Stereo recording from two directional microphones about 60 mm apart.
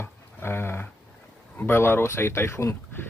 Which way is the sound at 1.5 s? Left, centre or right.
Left.